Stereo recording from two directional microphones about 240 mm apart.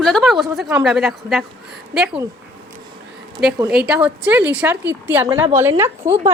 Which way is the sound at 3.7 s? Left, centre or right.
Centre.